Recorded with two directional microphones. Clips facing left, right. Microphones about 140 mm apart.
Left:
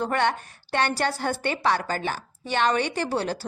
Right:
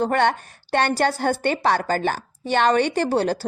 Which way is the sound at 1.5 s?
35° right (ahead or behind).